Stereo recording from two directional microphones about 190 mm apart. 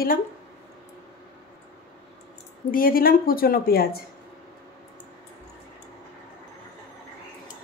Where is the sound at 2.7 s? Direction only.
50° left (ahead or behind).